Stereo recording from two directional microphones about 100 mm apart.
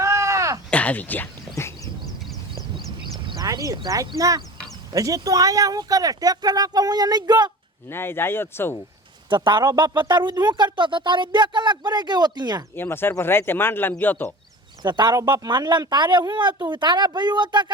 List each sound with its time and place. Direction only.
0.0 s a sound: 30° right (ahead or behind)
0.7 s a sound: 15° left (ahead or behind)
2.7 s duck: 55° right (ahead or behind)
3.3 s speech: 35° right (ahead or behind)
7.9 s speech: 25° left (ahead or behind)
9.3 s speech: 50° right (ahead or behind)
12.7 s speech: 20° left (ahead or behind)
14.8 s speech: 45° right (ahead or behind)
15.1 s speech: 35° right (ahead or behind)
15.4 s speech: 50° right (ahead or behind)